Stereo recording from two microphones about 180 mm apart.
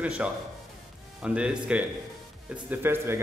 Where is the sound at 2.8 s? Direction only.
15° right (ahead or behind).